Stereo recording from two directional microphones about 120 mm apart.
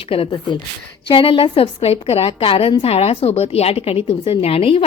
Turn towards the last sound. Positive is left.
turn(degrees=55)  # may be behind; listen again after turning